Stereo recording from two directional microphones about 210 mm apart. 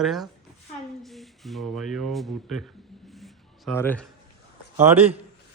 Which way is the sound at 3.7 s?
10° left (ahead or behind).